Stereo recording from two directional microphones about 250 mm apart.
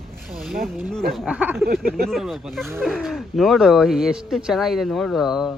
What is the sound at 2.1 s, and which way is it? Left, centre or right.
Speech, centre.